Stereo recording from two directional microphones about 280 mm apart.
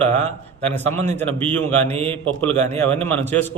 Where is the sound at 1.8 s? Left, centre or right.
Right.